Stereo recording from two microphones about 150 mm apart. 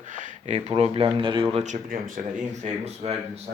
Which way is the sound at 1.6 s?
55° right (ahead or behind).